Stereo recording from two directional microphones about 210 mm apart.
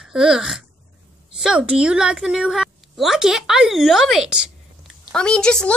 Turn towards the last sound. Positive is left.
turn(degrees=5)  # may be behind; listen again after turning